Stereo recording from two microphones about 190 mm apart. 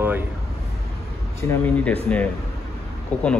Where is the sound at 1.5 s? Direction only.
5° left (ahead or behind).